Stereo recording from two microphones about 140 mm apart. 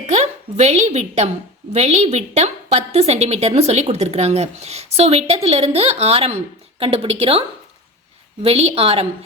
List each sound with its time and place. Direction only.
0.0 s a woman's voice: 55° right (ahead or behind)